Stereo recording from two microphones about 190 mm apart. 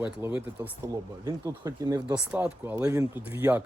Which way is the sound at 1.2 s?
20° right (ahead or behind).